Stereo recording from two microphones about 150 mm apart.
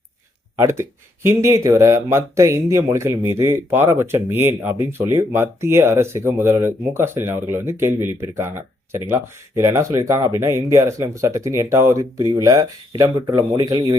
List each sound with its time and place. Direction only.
0.5 s speech: 20° right (ahead or behind)